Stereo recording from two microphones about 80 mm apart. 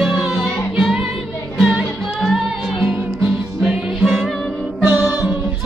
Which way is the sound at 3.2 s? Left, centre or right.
Centre.